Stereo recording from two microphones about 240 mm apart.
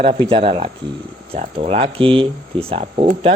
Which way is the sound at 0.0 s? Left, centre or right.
Right.